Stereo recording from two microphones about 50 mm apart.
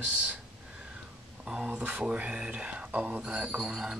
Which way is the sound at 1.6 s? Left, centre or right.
Right.